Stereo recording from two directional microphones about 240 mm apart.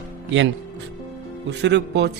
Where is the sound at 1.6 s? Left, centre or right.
Right.